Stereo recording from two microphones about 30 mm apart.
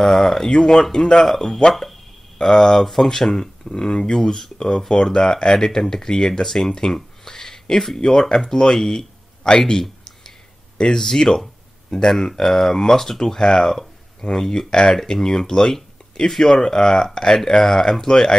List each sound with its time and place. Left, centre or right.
0.0 s speech: centre
4.0 s speech: centre
4.6 s speech: left
9.4 s a sound: left
10.8 s speech: centre
16.5 s speech: left